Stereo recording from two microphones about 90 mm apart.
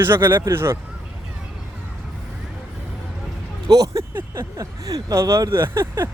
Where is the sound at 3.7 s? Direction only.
45° right (ahead or behind).